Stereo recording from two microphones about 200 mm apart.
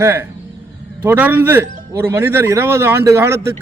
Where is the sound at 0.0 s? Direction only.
10° right (ahead or behind).